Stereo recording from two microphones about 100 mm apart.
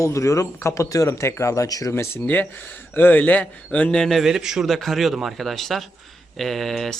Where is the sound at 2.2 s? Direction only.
15° left (ahead or behind).